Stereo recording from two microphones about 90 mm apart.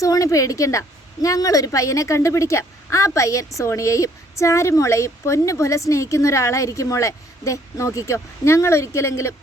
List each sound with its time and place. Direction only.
0.0 s a woman's voice: 40° left (ahead or behind)